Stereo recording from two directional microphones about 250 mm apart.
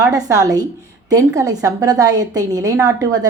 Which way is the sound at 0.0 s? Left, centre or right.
Centre.